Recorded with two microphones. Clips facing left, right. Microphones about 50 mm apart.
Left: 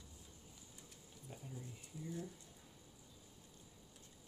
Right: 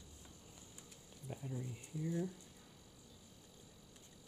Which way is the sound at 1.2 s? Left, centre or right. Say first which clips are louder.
Right 6 dB; right.